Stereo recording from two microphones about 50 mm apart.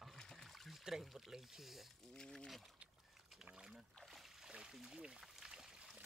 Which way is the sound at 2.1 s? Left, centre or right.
Centre.